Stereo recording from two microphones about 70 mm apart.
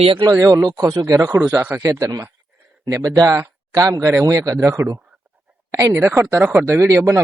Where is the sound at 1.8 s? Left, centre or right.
Right.